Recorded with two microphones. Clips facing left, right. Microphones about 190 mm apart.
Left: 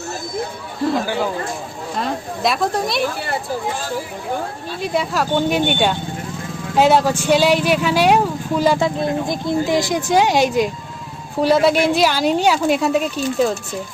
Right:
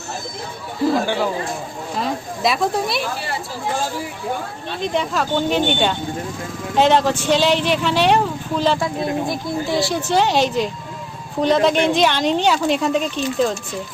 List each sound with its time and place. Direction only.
0.8 s speech: centre (ahead or behind)
4.8 s speech: 10° left (ahead or behind)